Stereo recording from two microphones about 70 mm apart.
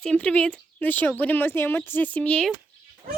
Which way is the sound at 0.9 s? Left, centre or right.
Left.